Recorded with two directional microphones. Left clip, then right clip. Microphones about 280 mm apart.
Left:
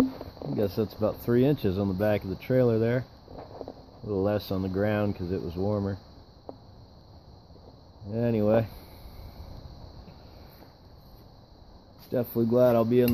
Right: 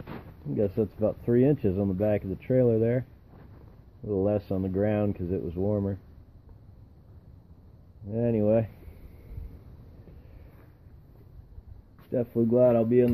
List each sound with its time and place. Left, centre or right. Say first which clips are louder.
0.6 s speech: right 1 dB; centre
4.1 s speech: right 1 dB; centre
8.1 s speech: even; centre
12.1 s speech: right 1 dB; centre